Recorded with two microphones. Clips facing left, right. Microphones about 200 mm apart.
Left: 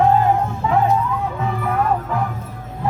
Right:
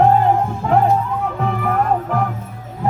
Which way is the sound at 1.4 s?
50° right (ahead or behind).